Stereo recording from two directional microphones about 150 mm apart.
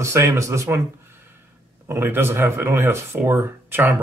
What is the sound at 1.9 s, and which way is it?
Speech, 15° right (ahead or behind).